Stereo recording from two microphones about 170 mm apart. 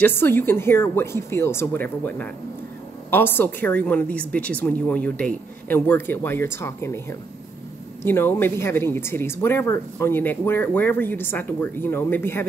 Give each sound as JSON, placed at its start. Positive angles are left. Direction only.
{"t": 0.0, "sound": "speech", "side_deg": 15}